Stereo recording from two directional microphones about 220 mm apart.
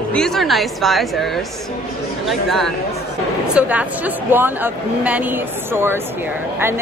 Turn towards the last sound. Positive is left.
turn(degrees=-10)  # may be behind; listen again after turning